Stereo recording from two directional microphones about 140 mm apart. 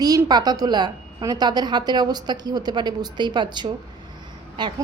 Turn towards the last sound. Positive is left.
turn(degrees=-30)  # may be behind; listen again after turning